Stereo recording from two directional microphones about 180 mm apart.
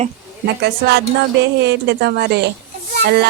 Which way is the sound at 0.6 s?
65° right (ahead or behind).